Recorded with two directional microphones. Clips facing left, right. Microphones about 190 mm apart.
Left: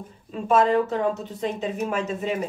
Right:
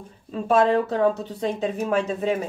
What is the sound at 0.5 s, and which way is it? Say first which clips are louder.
Speech: right 1 dB; 35° right (ahead or behind).